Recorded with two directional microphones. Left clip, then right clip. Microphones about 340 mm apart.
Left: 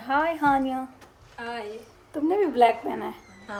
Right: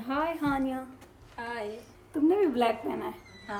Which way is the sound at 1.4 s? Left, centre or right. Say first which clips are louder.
Left 2 dB; centre.